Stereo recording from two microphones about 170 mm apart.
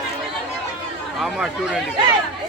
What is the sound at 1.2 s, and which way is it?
Speech, centre (ahead or behind).